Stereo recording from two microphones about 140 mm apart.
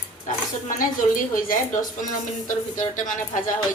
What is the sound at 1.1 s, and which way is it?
Speech, 80° left.